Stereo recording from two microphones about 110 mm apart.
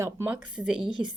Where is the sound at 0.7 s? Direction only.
5° right (ahead or behind).